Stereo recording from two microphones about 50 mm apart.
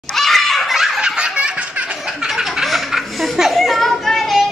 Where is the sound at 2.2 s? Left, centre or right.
Centre.